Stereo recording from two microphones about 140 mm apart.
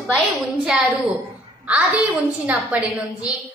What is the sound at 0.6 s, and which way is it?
A woman's voice, centre (ahead or behind).